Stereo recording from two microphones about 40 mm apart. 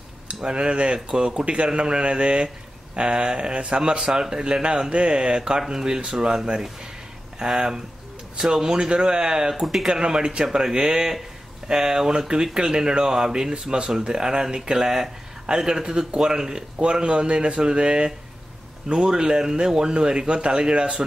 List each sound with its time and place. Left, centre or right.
0.3 s speech: right
16.7 s speech: right